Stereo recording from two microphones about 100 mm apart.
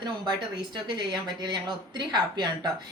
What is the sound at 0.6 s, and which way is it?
A woman's voice, 50° right (ahead or behind).